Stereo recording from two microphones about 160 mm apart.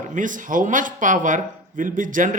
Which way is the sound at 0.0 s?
55° right (ahead or behind).